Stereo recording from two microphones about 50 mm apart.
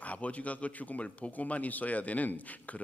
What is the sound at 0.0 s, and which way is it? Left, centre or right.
Speech, left.